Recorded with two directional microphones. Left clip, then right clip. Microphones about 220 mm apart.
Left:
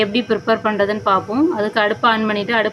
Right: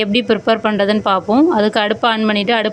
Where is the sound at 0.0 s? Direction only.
30° right (ahead or behind).